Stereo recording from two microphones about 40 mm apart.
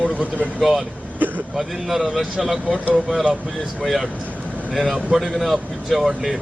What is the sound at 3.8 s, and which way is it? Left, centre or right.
Speech, centre.